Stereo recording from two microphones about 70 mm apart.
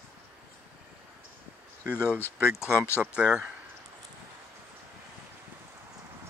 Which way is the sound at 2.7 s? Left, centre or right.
Left.